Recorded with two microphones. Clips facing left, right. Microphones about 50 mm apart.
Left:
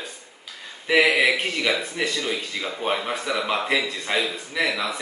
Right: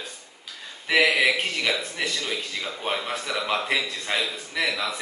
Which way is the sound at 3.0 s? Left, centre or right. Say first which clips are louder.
Left 3 dB; centre.